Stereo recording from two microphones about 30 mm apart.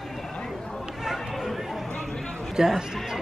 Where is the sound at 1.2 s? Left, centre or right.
Centre.